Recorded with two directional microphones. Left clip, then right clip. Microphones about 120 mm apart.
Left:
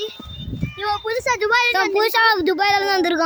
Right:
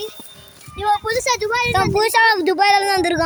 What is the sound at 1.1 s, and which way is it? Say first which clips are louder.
Speech: right 1 dB; 5° left (ahead or behind).